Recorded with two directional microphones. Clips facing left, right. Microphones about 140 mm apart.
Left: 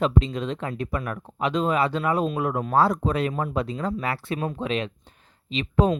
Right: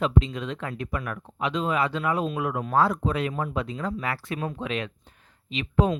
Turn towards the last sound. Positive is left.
turn(degrees=35)  # may be behind; listen again after turning